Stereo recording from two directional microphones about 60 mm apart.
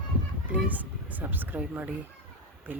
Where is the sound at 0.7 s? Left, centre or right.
Right.